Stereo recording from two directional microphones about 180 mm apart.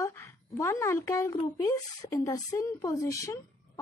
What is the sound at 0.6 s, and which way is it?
Speech, 15° left (ahead or behind).